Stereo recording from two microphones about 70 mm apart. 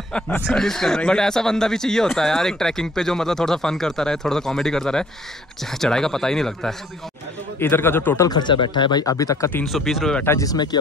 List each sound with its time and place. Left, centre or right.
0.5 s speech: centre
7.5 s a man's voice: left
8.3 s speech: left
9.7 s speech: centre
10.4 s speech: left